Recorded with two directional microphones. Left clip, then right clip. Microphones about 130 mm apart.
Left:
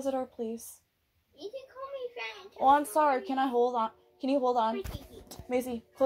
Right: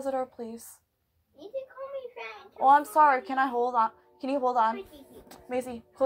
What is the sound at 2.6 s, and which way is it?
A woman's voice, 20° left (ahead or behind).